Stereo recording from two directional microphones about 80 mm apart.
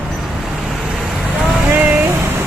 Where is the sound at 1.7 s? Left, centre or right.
Right.